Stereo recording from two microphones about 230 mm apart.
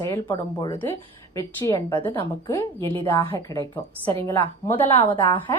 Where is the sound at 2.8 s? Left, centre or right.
Right.